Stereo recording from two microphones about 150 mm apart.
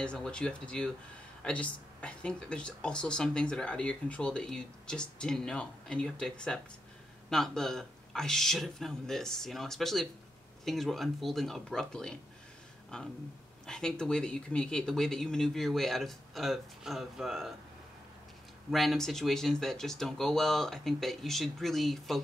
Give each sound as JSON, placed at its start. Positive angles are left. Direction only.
{"t": 0.0, "sound": "speech", "side_deg": 5}
{"t": 18.7, "sound": "speech", "side_deg": 0}